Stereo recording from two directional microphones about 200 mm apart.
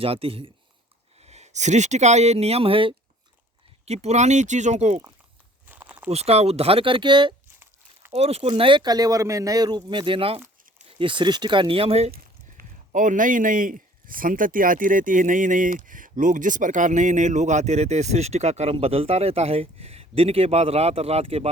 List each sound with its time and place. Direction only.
0.0 s speech: 30° right (ahead or behind)
5.6 s a sound: 5° right (ahead or behind)
6.1 s speech: 30° right (ahead or behind)
12.1 s speech: 45° right (ahead or behind)